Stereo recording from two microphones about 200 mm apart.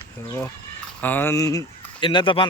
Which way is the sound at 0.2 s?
15° left (ahead or behind).